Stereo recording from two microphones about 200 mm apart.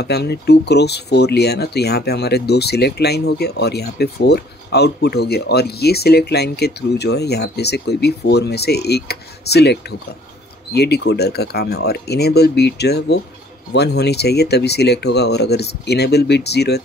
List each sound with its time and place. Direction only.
0.0 s speech: 55° left (ahead or behind)